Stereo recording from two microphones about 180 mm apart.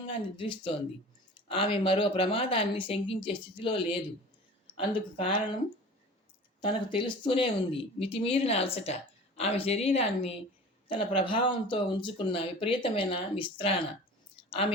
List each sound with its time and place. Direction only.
0.3 s speech: 30° left (ahead or behind)
6.6 s speech: 30° left (ahead or behind)
14.3 s a sound: 30° left (ahead or behind)